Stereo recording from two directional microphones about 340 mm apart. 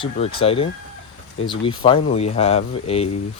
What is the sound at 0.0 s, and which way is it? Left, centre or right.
Speech, centre.